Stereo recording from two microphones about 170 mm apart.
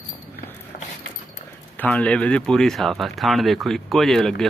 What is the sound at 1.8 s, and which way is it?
Speech, 5° left (ahead or behind).